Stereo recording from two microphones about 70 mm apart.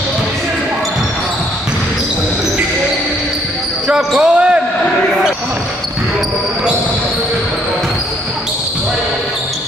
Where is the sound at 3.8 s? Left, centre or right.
Centre.